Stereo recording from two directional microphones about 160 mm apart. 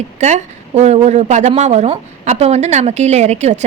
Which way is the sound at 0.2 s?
45° right (ahead or behind).